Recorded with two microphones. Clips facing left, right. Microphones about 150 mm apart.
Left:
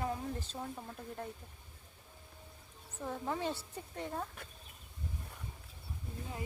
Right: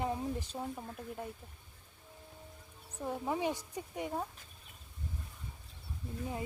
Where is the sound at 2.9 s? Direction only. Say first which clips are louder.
Right 2 dB; 15° right (ahead or behind).